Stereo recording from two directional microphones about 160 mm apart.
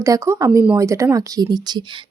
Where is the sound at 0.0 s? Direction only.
20° right (ahead or behind).